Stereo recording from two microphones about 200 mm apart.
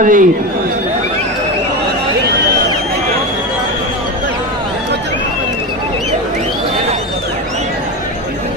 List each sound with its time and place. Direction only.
0.0 s a man's voice: 40° right (ahead or behind)